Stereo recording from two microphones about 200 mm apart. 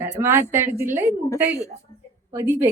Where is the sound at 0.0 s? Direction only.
10° right (ahead or behind).